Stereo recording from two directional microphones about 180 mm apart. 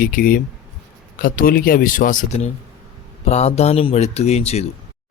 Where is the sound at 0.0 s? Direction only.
50° left (ahead or behind).